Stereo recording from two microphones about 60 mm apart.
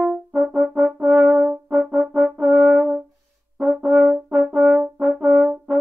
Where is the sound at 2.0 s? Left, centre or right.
Right.